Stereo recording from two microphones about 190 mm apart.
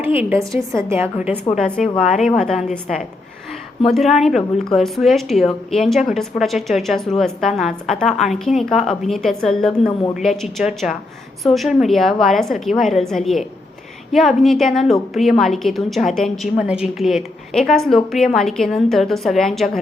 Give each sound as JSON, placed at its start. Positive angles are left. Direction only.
{"t": 0.0, "sound": "a woman's voice", "side_deg": -10}
{"t": 2.1, "sound": "a woman's voice", "side_deg": 0}
{"t": 3.8, "sound": "a woman's voice", "side_deg": 0}